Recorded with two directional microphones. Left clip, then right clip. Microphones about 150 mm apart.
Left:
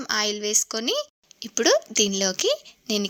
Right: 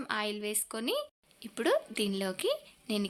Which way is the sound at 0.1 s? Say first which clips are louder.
Left 10 dB; 40° left (ahead or behind).